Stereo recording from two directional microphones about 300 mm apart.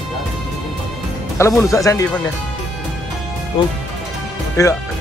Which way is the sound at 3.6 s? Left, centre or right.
Centre.